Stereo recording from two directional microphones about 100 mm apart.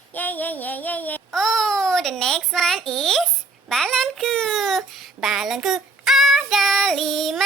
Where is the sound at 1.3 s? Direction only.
5° left (ahead or behind).